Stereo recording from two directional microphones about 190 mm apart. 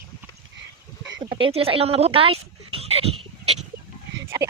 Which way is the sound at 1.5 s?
30° right (ahead or behind).